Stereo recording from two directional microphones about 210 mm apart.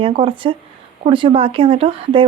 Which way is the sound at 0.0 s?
25° right (ahead or behind).